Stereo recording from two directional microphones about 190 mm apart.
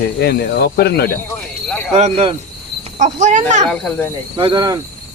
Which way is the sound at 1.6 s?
5° left (ahead or behind).